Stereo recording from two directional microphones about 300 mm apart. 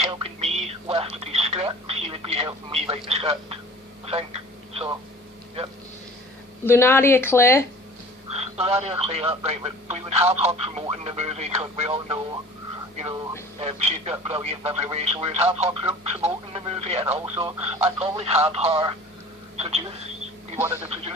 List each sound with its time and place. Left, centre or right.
0.0 s telephone: right
4.0 s speech: right
6.7 s speech: centre
8.3 s speech: centre
13.6 s speech: centre